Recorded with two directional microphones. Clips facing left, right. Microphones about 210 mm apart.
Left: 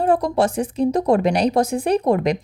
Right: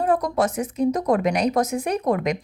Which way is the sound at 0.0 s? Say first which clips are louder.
Left 3 dB; 30° left (ahead or behind).